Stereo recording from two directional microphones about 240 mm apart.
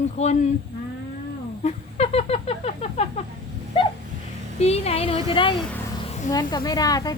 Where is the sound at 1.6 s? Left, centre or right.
Left.